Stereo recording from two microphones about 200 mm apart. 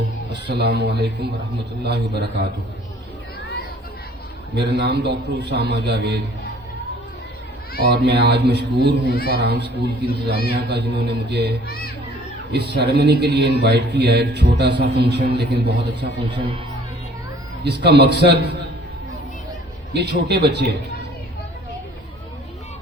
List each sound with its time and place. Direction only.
0.3 s a man's voice: 55° right (ahead or behind)
4.5 s a man's voice: 55° right (ahead or behind)
7.9 s a man's voice: 55° right (ahead or behind)
9.0 s speech: 50° left (ahead or behind)
9.3 s a man's voice: 55° right (ahead or behind)
17.6 s a man's voice: 55° right (ahead or behind)
19.9 s a man's voice: 55° right (ahead or behind)